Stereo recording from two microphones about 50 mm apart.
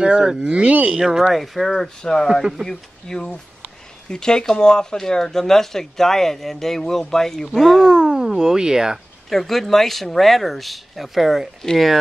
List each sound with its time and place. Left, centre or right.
0.0 s speech: centre
0.9 s speech: centre
7.8 s speech: centre
9.3 s speech: centre